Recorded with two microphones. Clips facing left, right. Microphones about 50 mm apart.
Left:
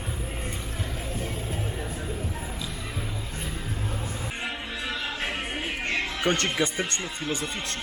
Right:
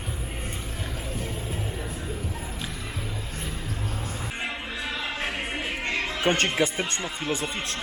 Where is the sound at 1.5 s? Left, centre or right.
Centre.